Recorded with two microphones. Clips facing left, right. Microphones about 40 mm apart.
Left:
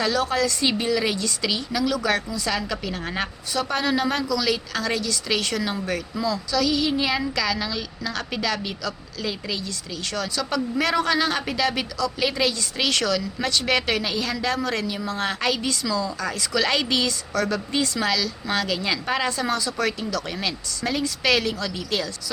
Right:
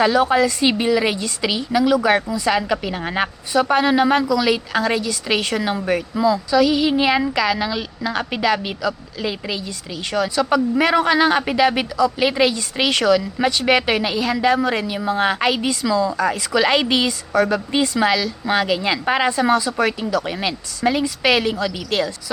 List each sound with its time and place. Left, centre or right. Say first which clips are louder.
0.0 s a woman's voice: right 7 dB; right